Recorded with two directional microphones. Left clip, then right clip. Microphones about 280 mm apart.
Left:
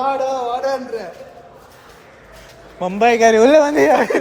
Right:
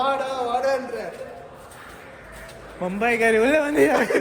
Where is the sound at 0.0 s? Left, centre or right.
Left.